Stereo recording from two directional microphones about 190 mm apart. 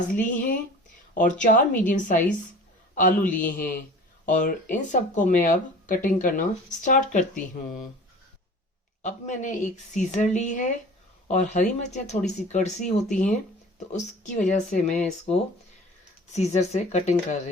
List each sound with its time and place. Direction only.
0.1 s a man's voice: 45° left (ahead or behind)
9.0 s a woman's voice: 40° left (ahead or behind)